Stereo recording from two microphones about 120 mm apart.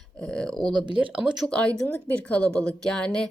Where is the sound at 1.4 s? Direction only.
10° left (ahead or behind).